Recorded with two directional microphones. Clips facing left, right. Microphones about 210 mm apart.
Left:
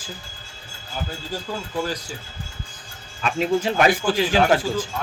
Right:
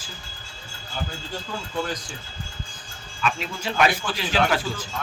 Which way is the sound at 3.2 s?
45° left (ahead or behind).